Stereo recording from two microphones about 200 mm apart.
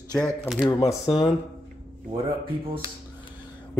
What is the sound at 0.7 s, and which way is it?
Speech, 15° left (ahead or behind).